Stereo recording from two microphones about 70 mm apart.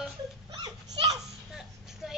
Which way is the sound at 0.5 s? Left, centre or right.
Right.